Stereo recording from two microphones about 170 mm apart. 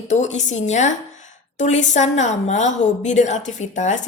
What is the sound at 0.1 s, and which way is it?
A woman's voice, 45° left (ahead or behind).